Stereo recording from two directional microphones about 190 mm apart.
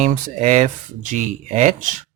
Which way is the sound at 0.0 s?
40° right (ahead or behind).